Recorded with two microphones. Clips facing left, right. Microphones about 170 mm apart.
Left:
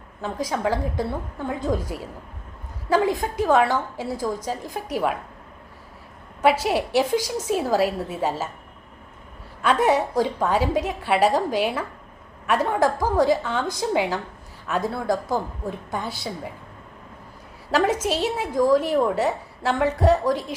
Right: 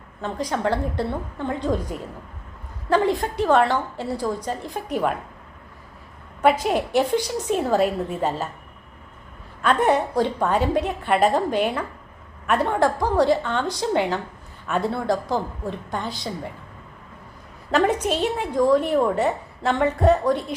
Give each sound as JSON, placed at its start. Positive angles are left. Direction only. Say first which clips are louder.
{"t": 0.2, "sound": "a woman's voice", "louder": "right 1 dB", "side_deg": 5}
{"t": 2.9, "sound": "a woman's voice", "louder": "right 1 dB", "side_deg": 5}
{"t": 6.4, "sound": "a woman's voice", "louder": "right 1 dB", "side_deg": 5}
{"t": 9.8, "sound": "a woman's voice", "louder": "even", "side_deg": 5}
{"t": 17.7, "sound": "a woman's voice", "louder": "right 1 dB", "side_deg": 5}